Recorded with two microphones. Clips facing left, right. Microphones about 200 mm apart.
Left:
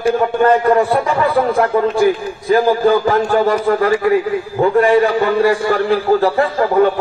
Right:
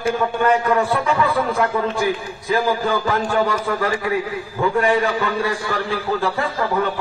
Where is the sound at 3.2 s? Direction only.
35° left (ahead or behind).